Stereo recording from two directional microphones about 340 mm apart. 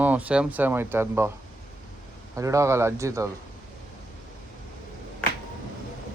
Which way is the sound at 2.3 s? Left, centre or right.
Centre.